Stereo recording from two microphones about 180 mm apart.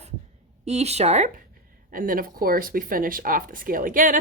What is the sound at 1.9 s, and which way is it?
Speech, 50° right (ahead or behind).